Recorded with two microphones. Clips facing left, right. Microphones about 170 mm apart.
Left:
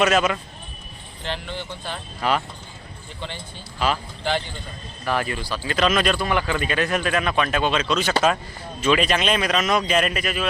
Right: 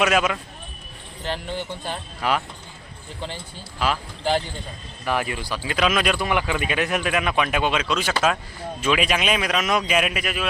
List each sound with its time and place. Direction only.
0.0 s speech: 5° right (ahead or behind)
1.2 s speech: 45° right (ahead or behind)
2.2 s speech: 5° right (ahead or behind)
4.2 s a man's voice: 40° right (ahead or behind)
5.0 s speech: 15° right (ahead or behind)